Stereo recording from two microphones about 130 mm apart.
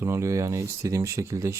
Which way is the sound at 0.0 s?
20° right (ahead or behind).